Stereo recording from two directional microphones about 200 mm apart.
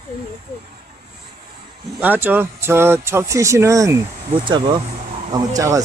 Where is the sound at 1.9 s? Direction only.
10° right (ahead or behind).